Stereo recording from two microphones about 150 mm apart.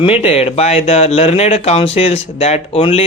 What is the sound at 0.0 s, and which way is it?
Speech, 40° left (ahead or behind).